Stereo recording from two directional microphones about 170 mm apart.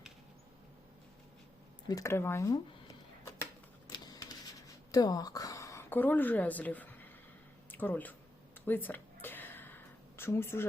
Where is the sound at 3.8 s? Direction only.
20° left (ahead or behind).